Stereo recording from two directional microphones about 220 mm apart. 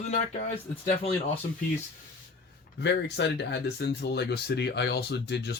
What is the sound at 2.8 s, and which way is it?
Speech, 50° left (ahead or behind).